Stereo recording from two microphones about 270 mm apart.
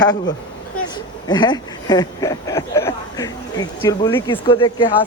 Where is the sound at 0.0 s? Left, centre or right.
Centre.